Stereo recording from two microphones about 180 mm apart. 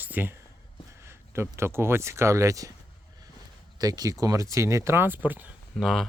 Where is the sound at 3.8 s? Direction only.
20° right (ahead or behind).